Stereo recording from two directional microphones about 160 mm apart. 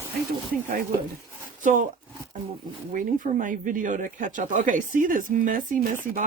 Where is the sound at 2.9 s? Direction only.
55° right (ahead or behind).